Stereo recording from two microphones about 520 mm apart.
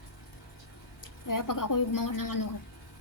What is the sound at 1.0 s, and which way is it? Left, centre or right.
A woman's voice, left.